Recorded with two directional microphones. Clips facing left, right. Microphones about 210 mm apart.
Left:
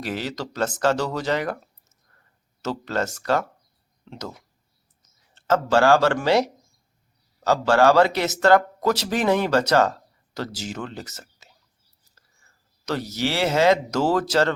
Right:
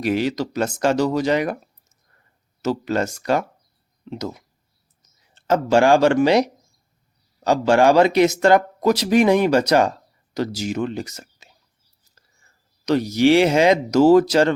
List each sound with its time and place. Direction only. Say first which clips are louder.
0.0 s speech: right 8 dB; 15° right (ahead or behind)
2.6 s speech: right 5 dB; 10° right (ahead or behind)
12.8 s speech: right 9 dB; 15° right (ahead or behind)